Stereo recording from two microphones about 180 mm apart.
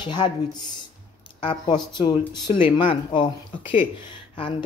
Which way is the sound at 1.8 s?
25° left (ahead or behind).